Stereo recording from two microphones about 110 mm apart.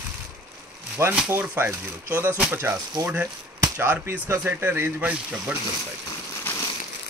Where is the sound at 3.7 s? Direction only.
15° right (ahead or behind).